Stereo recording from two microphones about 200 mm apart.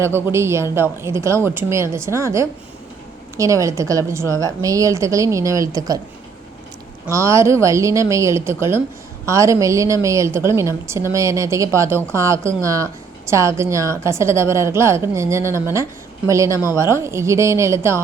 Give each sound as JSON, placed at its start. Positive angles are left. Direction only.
{"t": 0.0, "sound": "a woman's voice", "side_deg": -10}
{"t": 7.1, "sound": "a woman's voice", "side_deg": -15}